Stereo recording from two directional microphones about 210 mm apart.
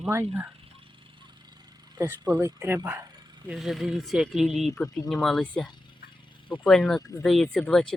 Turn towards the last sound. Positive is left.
turn(degrees=5)  # may be behind; listen again after turning